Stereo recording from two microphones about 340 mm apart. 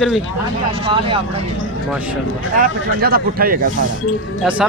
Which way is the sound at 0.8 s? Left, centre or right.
Centre.